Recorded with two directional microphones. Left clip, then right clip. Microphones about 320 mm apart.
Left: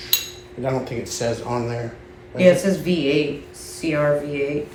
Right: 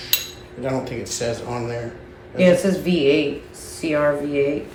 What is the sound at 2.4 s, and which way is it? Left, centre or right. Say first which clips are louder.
Speech: left 1 dB; centre.